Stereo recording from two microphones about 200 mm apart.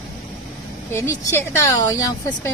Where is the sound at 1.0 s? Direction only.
15° left (ahead or behind).